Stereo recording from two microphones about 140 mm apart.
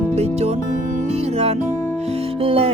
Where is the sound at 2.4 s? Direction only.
45° right (ahead or behind).